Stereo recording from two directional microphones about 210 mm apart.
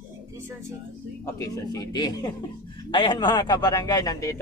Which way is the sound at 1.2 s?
15° left (ahead or behind).